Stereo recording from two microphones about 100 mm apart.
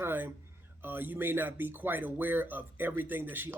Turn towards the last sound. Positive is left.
turn(degrees=-20)  # may be behind; listen again after turning